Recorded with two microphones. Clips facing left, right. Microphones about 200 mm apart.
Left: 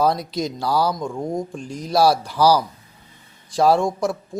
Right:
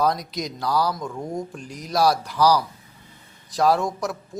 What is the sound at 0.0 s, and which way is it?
Speech, 30° left (ahead or behind).